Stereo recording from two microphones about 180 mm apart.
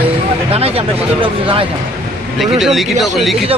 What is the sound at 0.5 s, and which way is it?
Speech, 35° right (ahead or behind).